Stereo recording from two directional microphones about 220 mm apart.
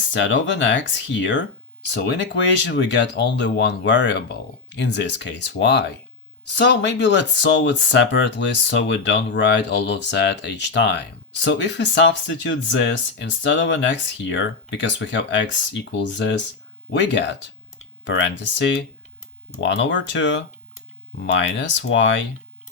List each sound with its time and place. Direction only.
0.1 s speech: 55° left (ahead or behind)